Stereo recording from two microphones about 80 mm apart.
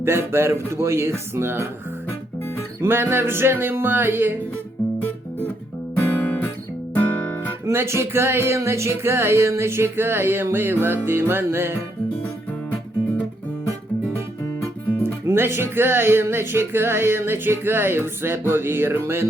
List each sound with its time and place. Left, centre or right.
0.0 s music: right
2.8 s music: right
5.9 s guitar: centre
6.9 s music: left
7.6 s music: right
15.0 s music: right